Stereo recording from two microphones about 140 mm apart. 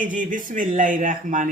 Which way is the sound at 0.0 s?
70° right (ahead or behind).